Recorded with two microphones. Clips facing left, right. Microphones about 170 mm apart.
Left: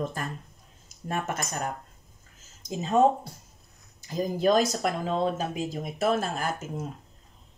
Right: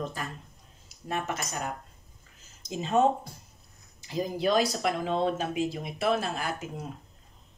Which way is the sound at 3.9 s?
45° left (ahead or behind).